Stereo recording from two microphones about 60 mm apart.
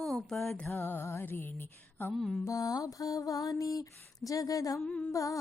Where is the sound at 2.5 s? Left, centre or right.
Left.